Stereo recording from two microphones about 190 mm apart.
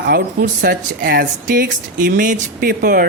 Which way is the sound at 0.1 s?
55° right (ahead or behind).